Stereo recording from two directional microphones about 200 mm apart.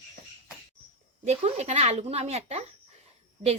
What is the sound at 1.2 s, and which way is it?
Speech, 35° right (ahead or behind).